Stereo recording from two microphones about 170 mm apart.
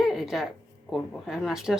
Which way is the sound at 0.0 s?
Centre (ahead or behind).